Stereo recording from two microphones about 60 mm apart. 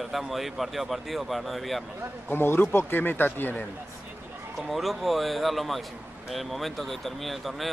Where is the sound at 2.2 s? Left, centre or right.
Left.